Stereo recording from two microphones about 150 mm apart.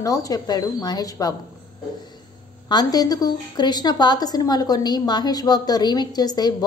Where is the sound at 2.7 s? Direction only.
25° left (ahead or behind).